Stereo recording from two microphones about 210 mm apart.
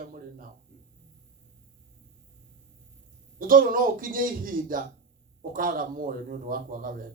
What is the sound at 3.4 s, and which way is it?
Speech, 40° right (ahead or behind).